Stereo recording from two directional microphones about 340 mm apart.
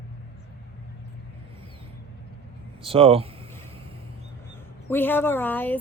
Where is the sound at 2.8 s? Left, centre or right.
Centre.